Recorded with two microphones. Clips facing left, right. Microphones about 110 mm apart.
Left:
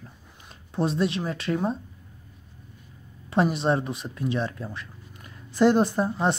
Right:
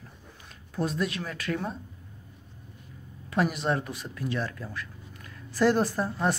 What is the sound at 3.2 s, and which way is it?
Speech, 25° left (ahead or behind).